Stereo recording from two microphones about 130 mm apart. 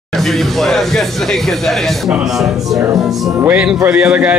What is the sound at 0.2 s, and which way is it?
A man's voice, centre (ahead or behind).